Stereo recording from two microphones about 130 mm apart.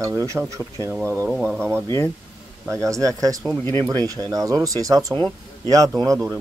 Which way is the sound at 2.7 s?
25° right (ahead or behind).